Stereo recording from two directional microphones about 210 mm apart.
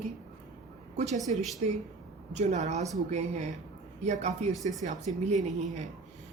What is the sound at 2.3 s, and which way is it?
Speech, 35° right (ahead or behind).